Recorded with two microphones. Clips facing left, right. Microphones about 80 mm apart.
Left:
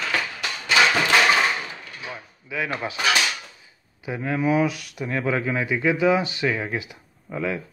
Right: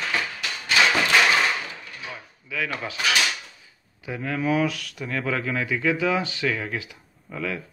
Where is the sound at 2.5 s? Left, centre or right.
Left.